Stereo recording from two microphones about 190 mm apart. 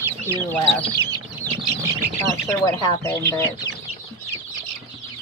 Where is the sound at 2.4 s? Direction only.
20° left (ahead or behind).